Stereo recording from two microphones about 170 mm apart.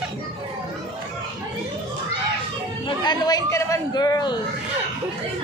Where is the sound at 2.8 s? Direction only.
25° left (ahead or behind).